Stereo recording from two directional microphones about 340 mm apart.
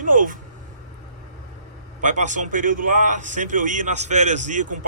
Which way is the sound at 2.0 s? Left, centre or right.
Right.